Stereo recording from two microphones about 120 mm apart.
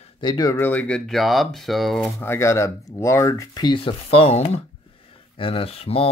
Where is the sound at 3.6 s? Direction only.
45° left (ahead or behind).